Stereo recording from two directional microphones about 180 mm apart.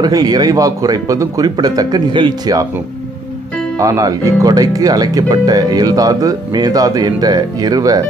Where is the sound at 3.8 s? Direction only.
20° right (ahead or behind).